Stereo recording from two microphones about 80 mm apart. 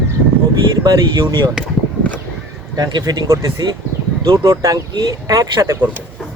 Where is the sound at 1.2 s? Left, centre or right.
Right.